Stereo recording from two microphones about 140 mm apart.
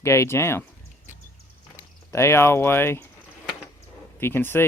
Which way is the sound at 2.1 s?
20° left (ahead or behind).